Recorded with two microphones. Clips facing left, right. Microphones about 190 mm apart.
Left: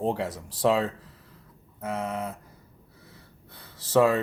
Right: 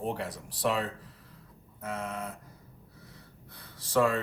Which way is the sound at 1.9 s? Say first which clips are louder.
Left 5 dB; 25° left (ahead or behind).